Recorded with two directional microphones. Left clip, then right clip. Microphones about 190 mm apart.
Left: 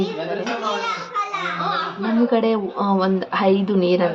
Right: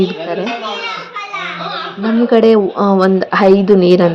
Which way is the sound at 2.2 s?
30° right (ahead or behind).